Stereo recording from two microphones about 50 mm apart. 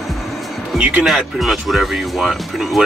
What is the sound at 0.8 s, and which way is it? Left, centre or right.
Music, right.